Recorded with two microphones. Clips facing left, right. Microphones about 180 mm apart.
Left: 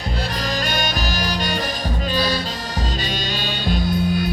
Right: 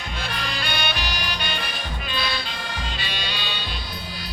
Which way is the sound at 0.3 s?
40° left (ahead or behind).